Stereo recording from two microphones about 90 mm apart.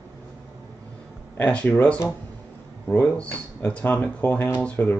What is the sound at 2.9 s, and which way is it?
Speech, 15° left (ahead or behind).